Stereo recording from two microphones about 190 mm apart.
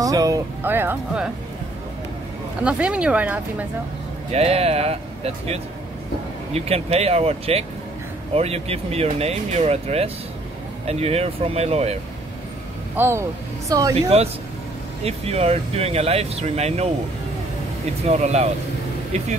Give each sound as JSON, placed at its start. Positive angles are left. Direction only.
{"t": 0.0, "sound": "speech", "side_deg": -20}
{"t": 2.6, "sound": "speech", "side_deg": -5}
{"t": 4.3, "sound": "speech", "side_deg": -30}
{"t": 12.9, "sound": "speech", "side_deg": -10}
{"t": 14.0, "sound": "speech", "side_deg": -30}
{"t": 18.0, "sound": "speech", "side_deg": -35}